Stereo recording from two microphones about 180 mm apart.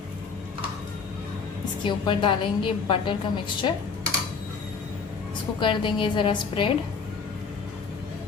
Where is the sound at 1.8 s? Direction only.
25° left (ahead or behind).